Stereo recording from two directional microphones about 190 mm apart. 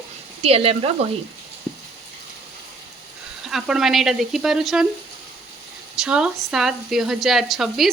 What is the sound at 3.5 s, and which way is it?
Speech, centre (ahead or behind).